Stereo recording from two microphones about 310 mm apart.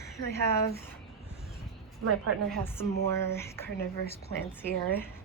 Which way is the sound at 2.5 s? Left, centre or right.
Centre.